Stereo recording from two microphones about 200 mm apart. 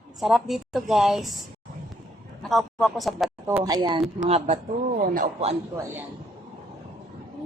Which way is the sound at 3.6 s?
20° right (ahead or behind).